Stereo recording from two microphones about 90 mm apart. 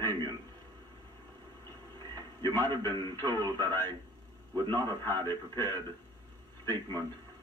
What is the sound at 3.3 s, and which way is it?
Speech, 45° right (ahead or behind).